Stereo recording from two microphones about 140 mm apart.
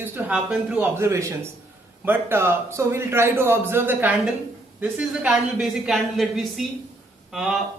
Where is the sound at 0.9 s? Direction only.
20° right (ahead or behind).